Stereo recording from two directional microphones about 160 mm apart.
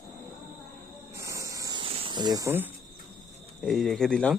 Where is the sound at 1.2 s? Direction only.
20° right (ahead or behind).